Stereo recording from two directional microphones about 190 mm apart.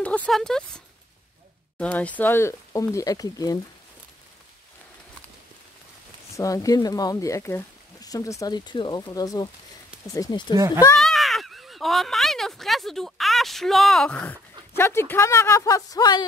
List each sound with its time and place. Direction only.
0.0 s speech: 10° left (ahead or behind)
6.3 s speech: 15° left (ahead or behind)
11.0 s speech: centre (ahead or behind); by 16.3 s 20° left (ahead or behind)